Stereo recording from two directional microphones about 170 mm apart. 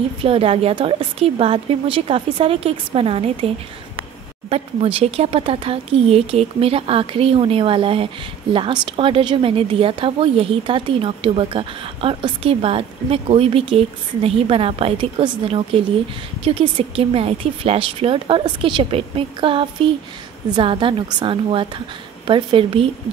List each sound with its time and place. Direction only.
0.2 s a woman's voice: 35° right (ahead or behind)